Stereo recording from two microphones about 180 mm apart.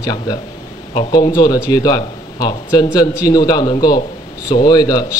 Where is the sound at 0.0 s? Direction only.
20° left (ahead or behind).